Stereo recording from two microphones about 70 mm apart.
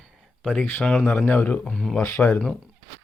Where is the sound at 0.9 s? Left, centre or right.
Centre.